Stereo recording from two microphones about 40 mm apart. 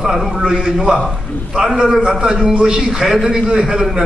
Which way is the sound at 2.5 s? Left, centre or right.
Right.